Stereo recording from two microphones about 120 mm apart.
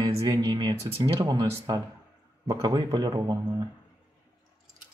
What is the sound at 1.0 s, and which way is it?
Speech, 35° right (ahead or behind).